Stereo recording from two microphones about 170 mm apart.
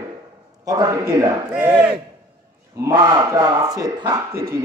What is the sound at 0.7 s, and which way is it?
Speech, 20° right (ahead or behind).